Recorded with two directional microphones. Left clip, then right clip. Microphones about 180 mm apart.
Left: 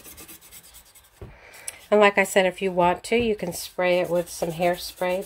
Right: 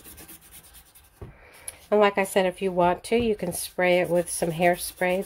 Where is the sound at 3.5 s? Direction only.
15° right (ahead or behind).